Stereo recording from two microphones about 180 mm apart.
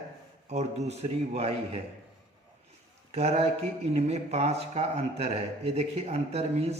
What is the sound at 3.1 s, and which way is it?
Speech, 35° right (ahead or behind).